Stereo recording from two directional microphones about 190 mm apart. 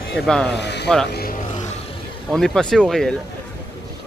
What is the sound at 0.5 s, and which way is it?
Speech, 65° left (ahead or behind).